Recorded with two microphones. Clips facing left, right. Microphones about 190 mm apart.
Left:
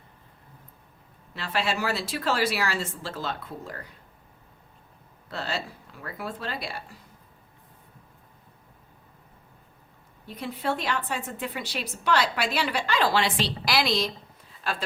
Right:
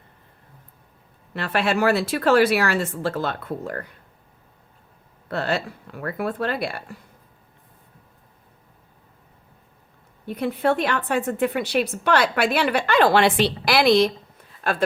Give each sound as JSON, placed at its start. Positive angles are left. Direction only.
{"t": 1.3, "sound": "a woman's voice", "side_deg": -60}
{"t": 5.3, "sound": "a woman's voice", "side_deg": -55}
{"t": 10.2, "sound": "a woman's voice", "side_deg": -55}